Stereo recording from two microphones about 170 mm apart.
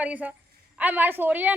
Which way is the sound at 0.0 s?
10° right (ahead or behind).